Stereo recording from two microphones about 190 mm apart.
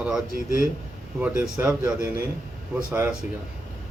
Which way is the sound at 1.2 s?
10° right (ahead or behind).